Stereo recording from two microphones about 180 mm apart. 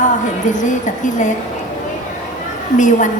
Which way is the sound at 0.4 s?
45° left (ahead or behind).